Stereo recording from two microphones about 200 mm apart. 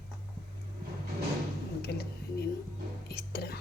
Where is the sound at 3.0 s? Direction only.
50° left (ahead or behind).